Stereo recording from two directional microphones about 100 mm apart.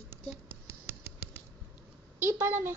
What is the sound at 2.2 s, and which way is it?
Speech, 25° right (ahead or behind).